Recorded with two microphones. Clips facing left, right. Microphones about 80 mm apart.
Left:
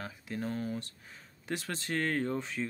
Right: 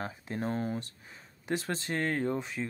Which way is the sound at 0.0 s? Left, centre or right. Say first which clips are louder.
Right 3 dB; right.